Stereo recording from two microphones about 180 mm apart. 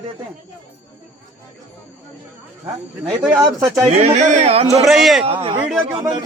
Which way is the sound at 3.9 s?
35° right (ahead or behind).